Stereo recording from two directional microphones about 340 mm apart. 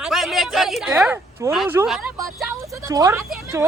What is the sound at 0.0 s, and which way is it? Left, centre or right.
Speech, centre.